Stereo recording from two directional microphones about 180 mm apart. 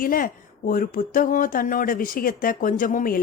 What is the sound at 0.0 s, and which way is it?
Speech, 50° left (ahead or behind).